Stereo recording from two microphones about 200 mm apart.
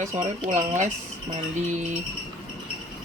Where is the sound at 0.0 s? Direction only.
35° right (ahead or behind).